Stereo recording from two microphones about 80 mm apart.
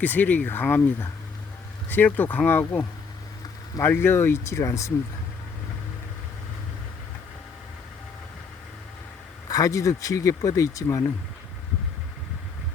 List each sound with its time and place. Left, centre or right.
0.0 s speech: left
3.8 s speech: left
9.5 s speech: left